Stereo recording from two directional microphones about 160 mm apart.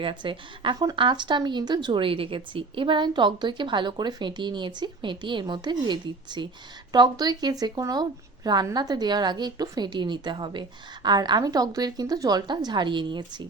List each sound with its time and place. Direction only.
0.0 s speech: 30° right (ahead or behind)